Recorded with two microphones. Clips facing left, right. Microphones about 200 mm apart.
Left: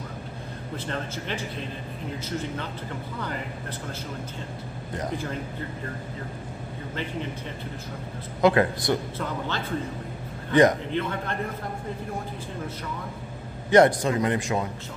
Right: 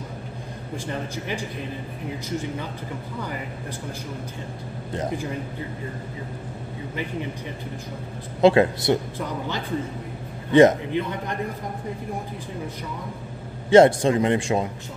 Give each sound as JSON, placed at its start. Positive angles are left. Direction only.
{"t": 0.8, "sound": "a man's voice", "side_deg": -15}
{"t": 5.1, "sound": "a man's voice", "side_deg": -15}
{"t": 8.4, "sound": "a man's voice", "side_deg": -25}
{"t": 13.7, "sound": "speech", "side_deg": -25}